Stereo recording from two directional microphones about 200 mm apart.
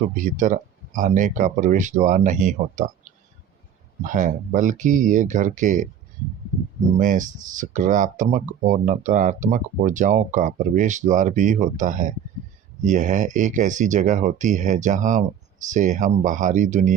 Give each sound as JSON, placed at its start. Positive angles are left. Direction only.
{"t": 0.3, "sound": "speech", "side_deg": -40}
{"t": 6.9, "sound": "speech", "side_deg": -40}